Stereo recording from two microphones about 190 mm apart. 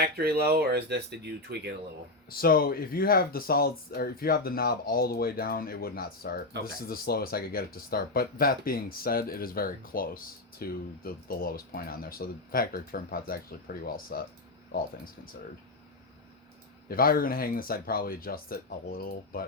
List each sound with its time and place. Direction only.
0.0 s speech: 55° right (ahead or behind)
2.3 s speech: 50° left (ahead or behind)
16.9 s speech: 50° left (ahead or behind)